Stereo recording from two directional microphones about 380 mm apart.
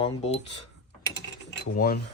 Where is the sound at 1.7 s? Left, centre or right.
Left.